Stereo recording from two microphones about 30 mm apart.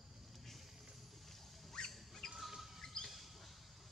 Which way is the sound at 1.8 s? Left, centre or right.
Left.